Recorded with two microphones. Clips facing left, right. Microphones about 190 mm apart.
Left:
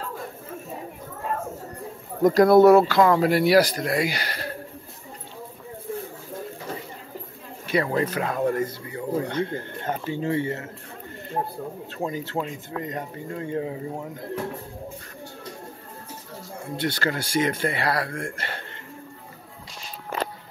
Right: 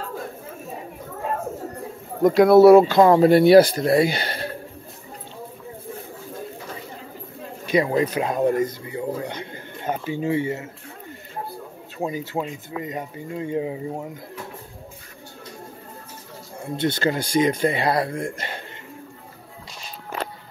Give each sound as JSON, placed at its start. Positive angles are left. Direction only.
{"t": 2.2, "sound": "speech", "side_deg": 0}
{"t": 2.7, "sound": "speech", "side_deg": -15}
{"t": 3.0, "sound": "a man's voice", "side_deg": -25}
{"t": 7.6, "sound": "speech", "side_deg": -15}
{"t": 12.0, "sound": "speech", "side_deg": -10}
{"t": 16.7, "sound": "a man's voice", "side_deg": -20}